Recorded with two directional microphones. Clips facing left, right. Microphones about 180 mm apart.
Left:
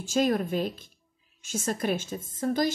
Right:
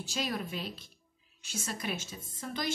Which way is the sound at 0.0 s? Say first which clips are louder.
Left 10 dB; 45° left (ahead or behind).